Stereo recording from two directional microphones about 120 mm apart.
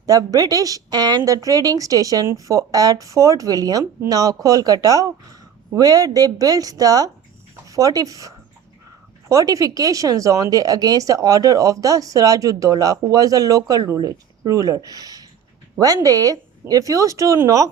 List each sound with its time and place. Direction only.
0.0 s speech: 30° right (ahead or behind)
9.3 s speech: 30° right (ahead or behind)